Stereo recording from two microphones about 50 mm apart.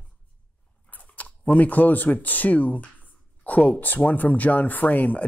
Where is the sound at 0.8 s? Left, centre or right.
Left.